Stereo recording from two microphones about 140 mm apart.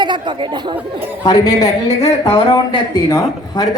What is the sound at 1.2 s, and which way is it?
A woman's voice, 25° left (ahead or behind).